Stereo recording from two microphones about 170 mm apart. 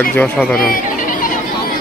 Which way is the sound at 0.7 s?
55° left (ahead or behind).